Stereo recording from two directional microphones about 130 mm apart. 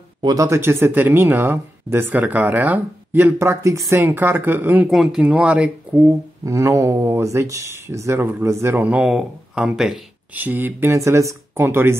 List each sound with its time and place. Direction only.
0.2 s speech: 25° right (ahead or behind)
4.8 s speech: centre (ahead or behind)
6.4 s speech: 25° right (ahead or behind); by 10.4 s 5° right (ahead or behind)
10.4 s speech: 15° right (ahead or behind)